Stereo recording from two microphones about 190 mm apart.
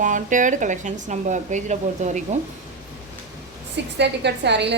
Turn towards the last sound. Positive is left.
turn(degrees=-65)  # may be behind; listen again after turning